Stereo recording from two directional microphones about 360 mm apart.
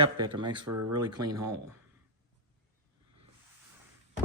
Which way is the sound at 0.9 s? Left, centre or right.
Centre.